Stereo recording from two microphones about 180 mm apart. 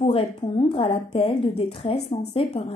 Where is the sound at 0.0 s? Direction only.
30° left (ahead or behind).